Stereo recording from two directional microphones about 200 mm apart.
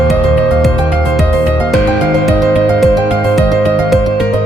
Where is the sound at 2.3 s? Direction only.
Centre (ahead or behind).